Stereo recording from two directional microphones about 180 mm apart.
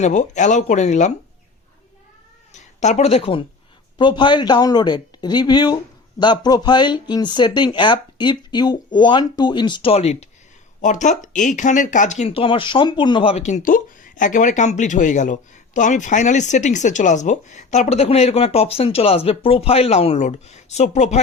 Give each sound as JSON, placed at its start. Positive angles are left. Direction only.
{"t": 0.0, "sound": "speech", "side_deg": 40}
{"t": 2.5, "sound": "speech", "side_deg": 40}